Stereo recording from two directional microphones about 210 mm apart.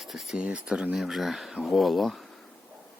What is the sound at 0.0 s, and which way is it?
Speech, centre (ahead or behind).